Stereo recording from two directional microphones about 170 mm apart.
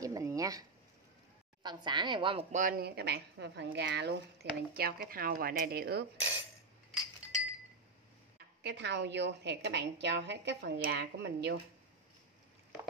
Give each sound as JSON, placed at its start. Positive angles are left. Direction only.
{"t": 0.0, "sound": "a sound", "side_deg": -20}
{"t": 1.6, "sound": "speech", "side_deg": -25}
{"t": 2.5, "sound": "speech", "side_deg": -50}
{"t": 3.0, "sound": "a woman's voice", "side_deg": -75}
{"t": 8.6, "sound": "a woman's voice", "side_deg": -90}
{"t": 10.8, "sound": "a woman's voice", "side_deg": -75}